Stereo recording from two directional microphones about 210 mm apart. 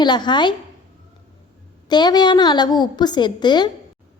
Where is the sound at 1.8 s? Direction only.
20° left (ahead or behind).